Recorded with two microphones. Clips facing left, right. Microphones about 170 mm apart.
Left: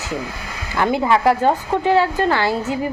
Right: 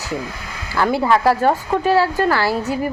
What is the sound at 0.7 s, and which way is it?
A woman's voice, 20° left (ahead or behind).